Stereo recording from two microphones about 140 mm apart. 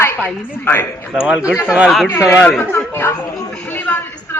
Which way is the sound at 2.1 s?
20° left (ahead or behind).